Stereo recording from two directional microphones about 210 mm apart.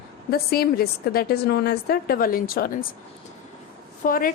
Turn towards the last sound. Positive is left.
turn(degrees=40)  # may be behind; listen again after turning